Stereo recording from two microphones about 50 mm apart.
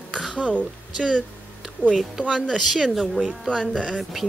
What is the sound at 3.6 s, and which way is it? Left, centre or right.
Speech, centre.